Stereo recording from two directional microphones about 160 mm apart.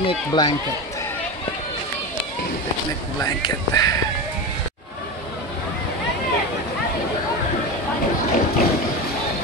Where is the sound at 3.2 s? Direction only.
20° left (ahead or behind).